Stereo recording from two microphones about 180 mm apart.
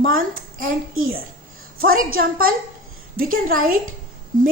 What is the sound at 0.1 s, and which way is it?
Speech, 50° right (ahead or behind).